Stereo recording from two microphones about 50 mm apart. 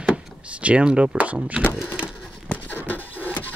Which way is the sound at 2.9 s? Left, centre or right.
Left.